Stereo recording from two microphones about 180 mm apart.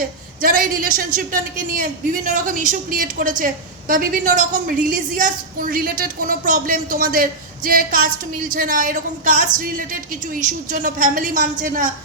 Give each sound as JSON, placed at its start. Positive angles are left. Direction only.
{"t": 0.4, "sound": "a woman's voice", "side_deg": -50}